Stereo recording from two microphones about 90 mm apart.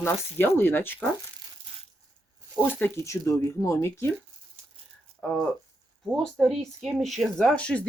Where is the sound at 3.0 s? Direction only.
35° left (ahead or behind).